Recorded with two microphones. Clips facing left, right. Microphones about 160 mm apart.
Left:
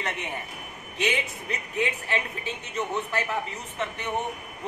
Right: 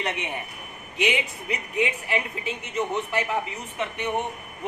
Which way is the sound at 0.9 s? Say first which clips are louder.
Right 2 dB; 15° right (ahead or behind).